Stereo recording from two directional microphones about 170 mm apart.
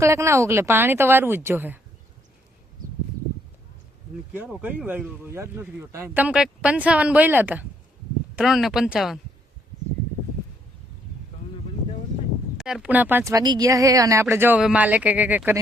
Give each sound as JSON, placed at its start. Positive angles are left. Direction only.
{"t": 0.0, "sound": "speech", "side_deg": -15}
{"t": 4.3, "sound": "speech", "side_deg": -10}
{"t": 12.5, "sound": "speech", "side_deg": -5}